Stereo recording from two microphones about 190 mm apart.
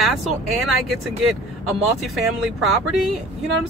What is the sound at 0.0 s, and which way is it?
Speech, centre (ahead or behind).